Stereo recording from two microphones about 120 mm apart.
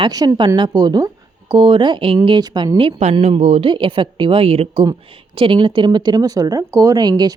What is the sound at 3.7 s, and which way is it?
A woman's voice, 45° right (ahead or behind).